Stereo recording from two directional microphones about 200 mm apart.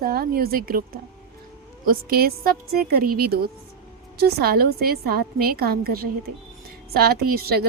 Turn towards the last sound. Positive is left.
turn(degrees=-50)  # may be behind; listen again after turning